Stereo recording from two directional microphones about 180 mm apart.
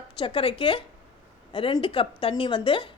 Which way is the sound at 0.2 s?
30° left (ahead or behind).